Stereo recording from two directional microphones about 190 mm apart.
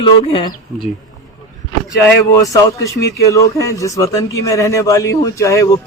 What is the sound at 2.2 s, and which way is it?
A man's voice, 15° left (ahead or behind).